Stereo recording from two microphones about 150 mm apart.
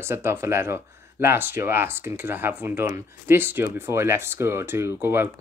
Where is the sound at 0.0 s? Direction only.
15° right (ahead or behind).